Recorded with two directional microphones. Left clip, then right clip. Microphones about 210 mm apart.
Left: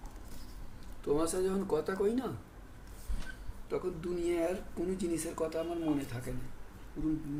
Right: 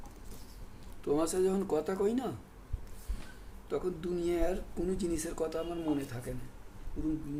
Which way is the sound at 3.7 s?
20° right (ahead or behind).